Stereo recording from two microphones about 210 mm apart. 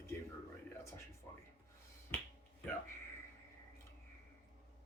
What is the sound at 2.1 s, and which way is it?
Finger snapping, 10° left (ahead or behind).